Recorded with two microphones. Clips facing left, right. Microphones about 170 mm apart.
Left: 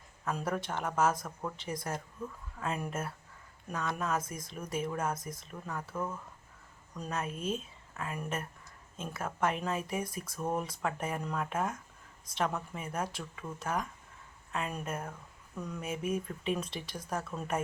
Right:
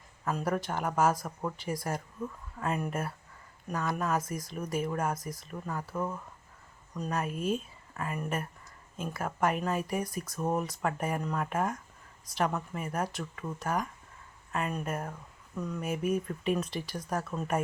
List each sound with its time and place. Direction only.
0.3 s speech: centre (ahead or behind)
6.9 s speech: centre (ahead or behind)